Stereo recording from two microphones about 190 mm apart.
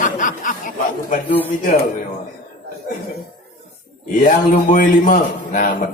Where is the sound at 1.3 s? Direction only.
10° left (ahead or behind).